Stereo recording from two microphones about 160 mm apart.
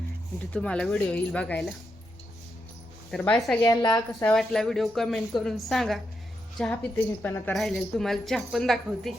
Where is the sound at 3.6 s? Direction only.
25° left (ahead or behind).